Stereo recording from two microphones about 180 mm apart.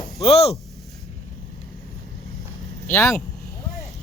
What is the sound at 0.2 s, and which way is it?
Speech, 35° left (ahead or behind).